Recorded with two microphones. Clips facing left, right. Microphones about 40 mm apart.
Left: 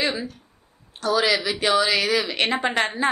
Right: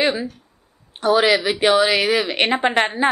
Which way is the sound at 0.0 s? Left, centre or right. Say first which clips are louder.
Right 5 dB; centre.